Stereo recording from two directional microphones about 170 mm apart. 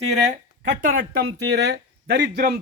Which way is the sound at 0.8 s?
55° right (ahead or behind).